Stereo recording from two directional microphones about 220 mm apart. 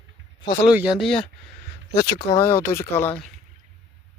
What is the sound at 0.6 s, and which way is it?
Speech, 5° right (ahead or behind).